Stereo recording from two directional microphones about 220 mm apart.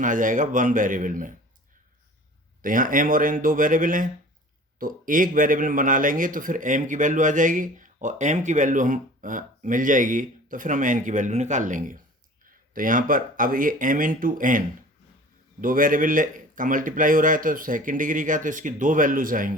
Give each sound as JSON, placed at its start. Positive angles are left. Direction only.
{"t": 0.0, "sound": "a man's voice", "side_deg": -35}
{"t": 2.6, "sound": "a man's voice", "side_deg": -40}